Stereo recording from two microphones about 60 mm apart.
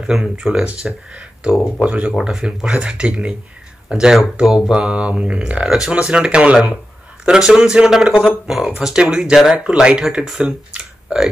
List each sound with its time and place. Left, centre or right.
0.0 s speech: centre
8.2 s speech: centre
8.7 s speech: centre
10.2 s speech: centre
10.7 s computer keyboard: centre